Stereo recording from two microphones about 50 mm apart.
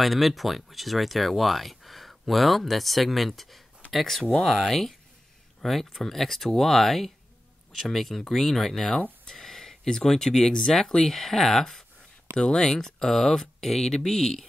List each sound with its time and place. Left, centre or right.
0.0 s speech: centre